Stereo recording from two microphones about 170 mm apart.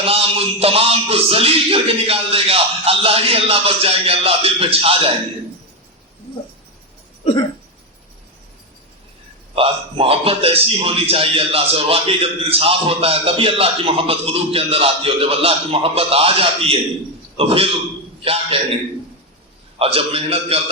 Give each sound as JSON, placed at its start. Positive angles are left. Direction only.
{"t": 0.0, "sound": "a man's voice", "side_deg": -35}
{"t": 9.6, "sound": "a man's voice", "side_deg": -35}
{"t": 19.8, "sound": "a man's voice", "side_deg": -35}